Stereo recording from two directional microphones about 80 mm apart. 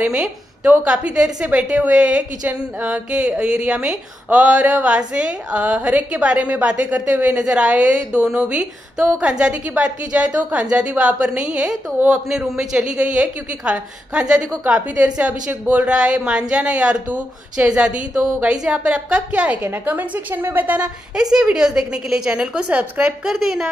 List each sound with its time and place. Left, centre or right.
0.0 s a woman's voice: centre
21.2 s a woman's voice: centre